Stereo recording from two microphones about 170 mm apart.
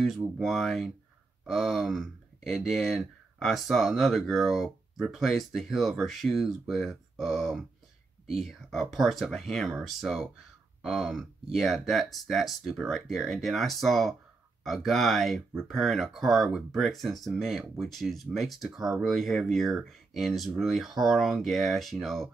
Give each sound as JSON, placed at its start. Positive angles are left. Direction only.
{"t": 0.0, "sound": "speech", "side_deg": 0}